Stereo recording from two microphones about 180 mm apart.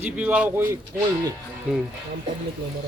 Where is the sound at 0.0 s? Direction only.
10° right (ahead or behind).